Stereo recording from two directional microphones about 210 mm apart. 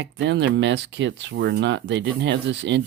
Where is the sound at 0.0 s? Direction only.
60° right (ahead or behind).